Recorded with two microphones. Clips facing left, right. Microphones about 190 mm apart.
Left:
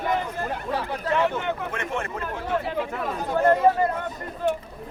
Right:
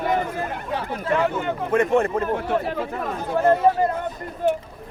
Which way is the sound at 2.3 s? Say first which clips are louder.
Right 3 dB; 55° right (ahead or behind).